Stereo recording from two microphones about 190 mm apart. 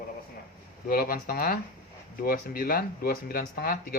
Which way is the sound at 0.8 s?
50° left (ahead or behind).